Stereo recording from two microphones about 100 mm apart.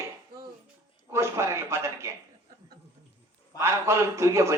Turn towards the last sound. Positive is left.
turn(degrees=-30)  # may be behind; listen again after turning